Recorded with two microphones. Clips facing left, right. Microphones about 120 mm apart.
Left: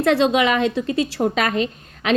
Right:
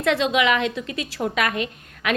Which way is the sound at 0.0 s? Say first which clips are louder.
Left 4 dB; 35° left (ahead or behind).